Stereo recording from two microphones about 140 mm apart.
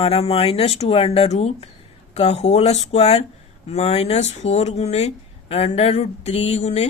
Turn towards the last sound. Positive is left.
turn(degrees=50)  # may be behind; listen again after turning